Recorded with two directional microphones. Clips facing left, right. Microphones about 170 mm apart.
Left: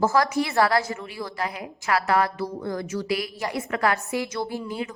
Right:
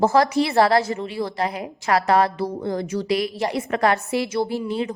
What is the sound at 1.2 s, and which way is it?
A woman's voice, 35° right (ahead or behind).